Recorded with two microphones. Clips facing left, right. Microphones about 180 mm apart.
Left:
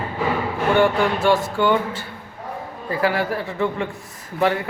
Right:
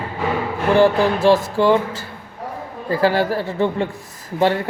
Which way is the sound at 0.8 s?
35° right (ahead or behind).